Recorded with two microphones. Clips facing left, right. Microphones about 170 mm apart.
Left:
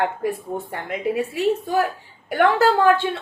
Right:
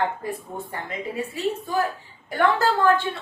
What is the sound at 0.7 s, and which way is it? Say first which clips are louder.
Speech: left 7 dB; 70° left (ahead or behind).